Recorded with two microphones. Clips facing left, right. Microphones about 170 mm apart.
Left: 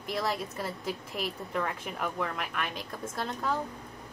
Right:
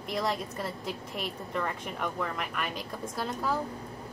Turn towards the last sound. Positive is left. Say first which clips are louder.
# right 1 dB
turn(degrees=0)  # may be behind; listen again after turning